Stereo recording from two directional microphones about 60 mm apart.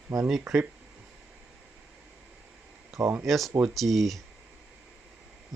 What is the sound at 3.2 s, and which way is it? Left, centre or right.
Speech, centre.